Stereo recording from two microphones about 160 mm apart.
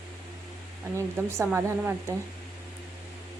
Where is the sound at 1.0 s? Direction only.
15° right (ahead or behind).